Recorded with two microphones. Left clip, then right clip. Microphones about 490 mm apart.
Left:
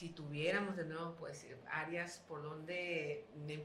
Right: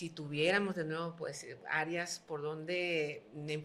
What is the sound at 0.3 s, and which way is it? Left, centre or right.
Speech, right.